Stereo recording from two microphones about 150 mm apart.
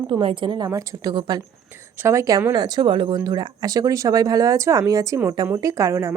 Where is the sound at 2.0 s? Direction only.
20° right (ahead or behind).